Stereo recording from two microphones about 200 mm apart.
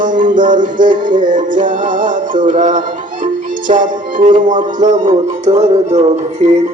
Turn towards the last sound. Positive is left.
turn(degrees=-35)  # may be behind; listen again after turning